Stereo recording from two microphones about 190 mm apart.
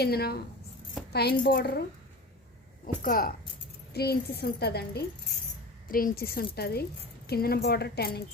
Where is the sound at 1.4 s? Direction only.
60° left (ahead or behind).